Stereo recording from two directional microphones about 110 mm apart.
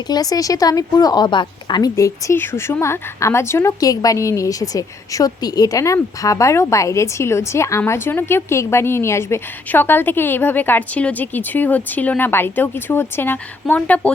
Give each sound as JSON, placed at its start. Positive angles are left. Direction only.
{"t": 0.1, "sound": "a woman's voice", "side_deg": 35}
{"t": 2.0, "sound": "a woman's voice", "side_deg": 30}